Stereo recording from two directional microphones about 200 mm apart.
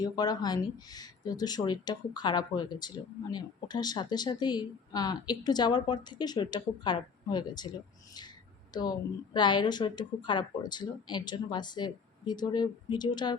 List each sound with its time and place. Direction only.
0.0 s speech: 20° left (ahead or behind)